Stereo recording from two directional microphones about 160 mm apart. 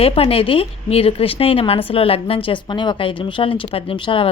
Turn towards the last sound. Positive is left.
turn(degrees=30)  # may be behind; listen again after turning